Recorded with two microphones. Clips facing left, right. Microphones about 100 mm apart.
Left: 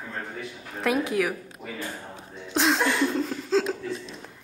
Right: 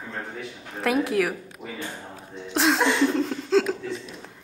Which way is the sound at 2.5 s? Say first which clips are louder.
Right 2 dB; centre (ahead or behind).